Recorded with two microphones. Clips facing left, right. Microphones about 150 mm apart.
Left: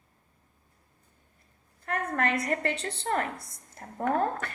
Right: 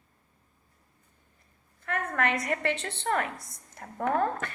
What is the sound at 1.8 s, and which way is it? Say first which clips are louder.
A woman's voice: even; 40° left (ahead or behind).